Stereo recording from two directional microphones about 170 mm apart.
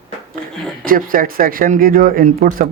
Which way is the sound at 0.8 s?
55° right (ahead or behind).